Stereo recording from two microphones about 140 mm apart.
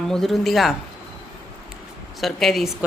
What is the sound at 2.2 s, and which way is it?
Speech, centre (ahead or behind).